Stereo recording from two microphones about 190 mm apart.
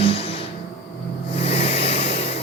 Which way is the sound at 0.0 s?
30° left (ahead or behind).